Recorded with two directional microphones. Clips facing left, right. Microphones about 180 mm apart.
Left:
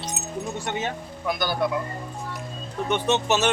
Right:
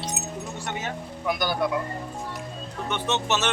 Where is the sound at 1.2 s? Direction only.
15° right (ahead or behind).